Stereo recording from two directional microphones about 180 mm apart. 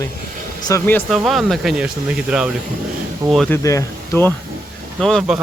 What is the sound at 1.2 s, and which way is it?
Speech, centre (ahead or behind).